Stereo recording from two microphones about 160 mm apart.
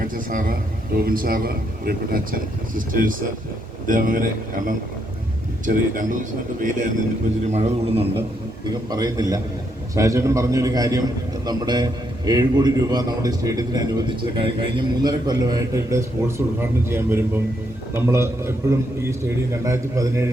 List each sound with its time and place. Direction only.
0.0 s a man's voice: 60° right (ahead or behind)
7.5 s a man's voice: 40° right (ahead or behind)
8.9 s a man's voice: 25° right (ahead or behind)